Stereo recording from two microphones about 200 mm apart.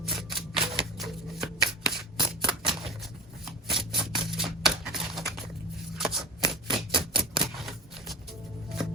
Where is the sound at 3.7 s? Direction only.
Centre (ahead or behind).